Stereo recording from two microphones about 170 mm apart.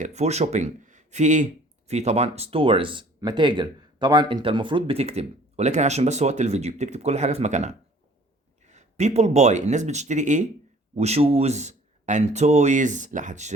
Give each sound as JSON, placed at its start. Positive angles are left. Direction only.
{"t": 0.0, "sound": "speech", "side_deg": -40}